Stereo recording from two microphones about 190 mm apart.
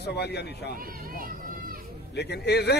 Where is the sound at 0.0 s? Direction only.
60° left (ahead or behind).